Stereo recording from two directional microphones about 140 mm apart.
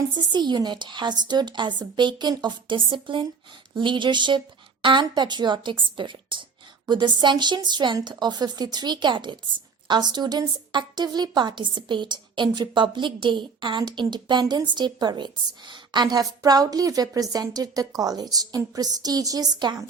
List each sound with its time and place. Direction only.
0.1 s a woman's voice: 35° right (ahead or behind)